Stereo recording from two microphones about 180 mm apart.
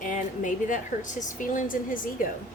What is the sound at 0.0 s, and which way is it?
A woman's voice, 45° left (ahead or behind).